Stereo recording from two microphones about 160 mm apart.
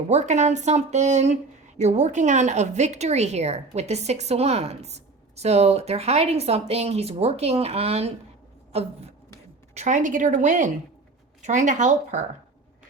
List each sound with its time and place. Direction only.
0.1 s a woman's voice: 45° right (ahead or behind)
9.7 s speech: 50° right (ahead or behind)